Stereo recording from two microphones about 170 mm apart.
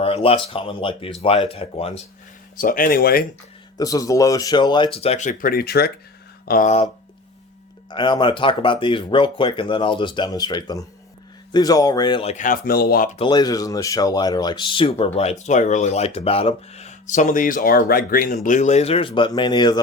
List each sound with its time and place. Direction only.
0.0 s speech: 35° left (ahead or behind)
2.6 s speech: 55° left (ahead or behind)
3.8 s speech: 20° left (ahead or behind); by 5.9 s 65° left (ahead or behind)
6.5 s speech: 50° left (ahead or behind)
7.9 s speech: 25° left (ahead or behind)
12.3 s speech: 50° left (ahead or behind)
13.1 s speech: 25° left (ahead or behind); by 18.3 s 55° left (ahead or behind)
18.4 s speech: 45° left (ahead or behind); by 19.8 s 25° left (ahead or behind)